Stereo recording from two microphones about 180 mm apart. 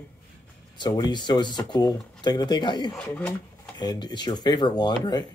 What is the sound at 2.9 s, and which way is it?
Speech, 5° left (ahead or behind).